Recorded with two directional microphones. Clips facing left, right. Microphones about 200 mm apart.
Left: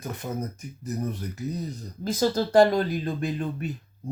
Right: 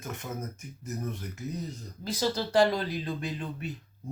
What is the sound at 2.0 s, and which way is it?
Speech, 50° left (ahead or behind).